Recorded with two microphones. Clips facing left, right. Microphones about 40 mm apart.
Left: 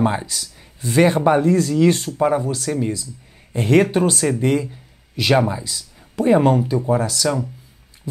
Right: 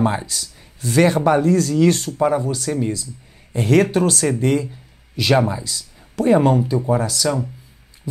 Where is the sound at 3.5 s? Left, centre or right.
Left.